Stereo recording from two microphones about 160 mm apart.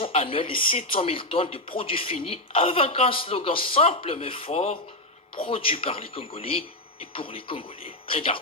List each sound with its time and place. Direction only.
0.0 s speech: 35° left (ahead or behind)